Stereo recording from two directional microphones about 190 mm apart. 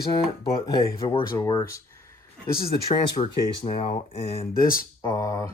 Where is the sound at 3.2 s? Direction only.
30° left (ahead or behind).